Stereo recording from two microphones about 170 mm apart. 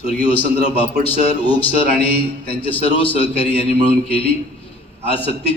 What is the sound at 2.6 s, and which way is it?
A man's voice, 30° left (ahead or behind).